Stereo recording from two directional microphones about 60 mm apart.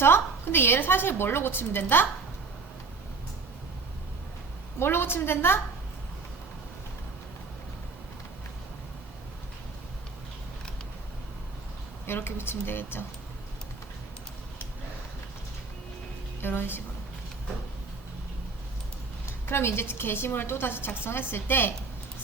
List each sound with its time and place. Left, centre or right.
0.0 s a woman's voice: left
4.8 s a woman's voice: left
12.0 s a woman's voice: left
16.4 s a woman's voice: left
19.2 s a woman's voice: left